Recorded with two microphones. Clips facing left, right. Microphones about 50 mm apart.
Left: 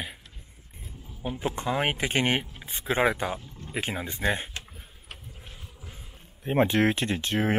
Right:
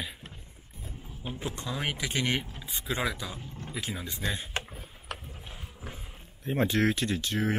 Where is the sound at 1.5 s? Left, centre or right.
Left.